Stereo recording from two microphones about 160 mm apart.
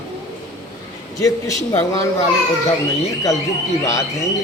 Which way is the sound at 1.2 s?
20° left (ahead or behind).